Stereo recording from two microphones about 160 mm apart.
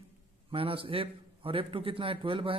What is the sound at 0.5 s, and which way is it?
A man's voice, 35° right (ahead or behind).